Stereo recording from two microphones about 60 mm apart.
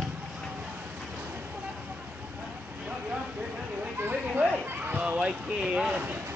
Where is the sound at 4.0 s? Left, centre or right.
Right.